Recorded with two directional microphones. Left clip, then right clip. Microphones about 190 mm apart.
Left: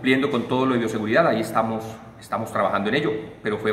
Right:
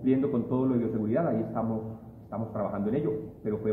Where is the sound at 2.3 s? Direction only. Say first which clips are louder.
Left 11 dB; 25° left (ahead or behind).